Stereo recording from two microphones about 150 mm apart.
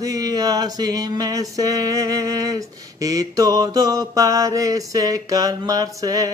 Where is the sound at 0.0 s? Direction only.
25° right (ahead or behind).